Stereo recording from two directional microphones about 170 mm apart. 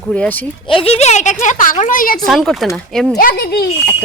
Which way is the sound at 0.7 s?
35° left (ahead or behind).